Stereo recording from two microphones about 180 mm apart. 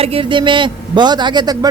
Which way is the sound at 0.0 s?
30° right (ahead or behind).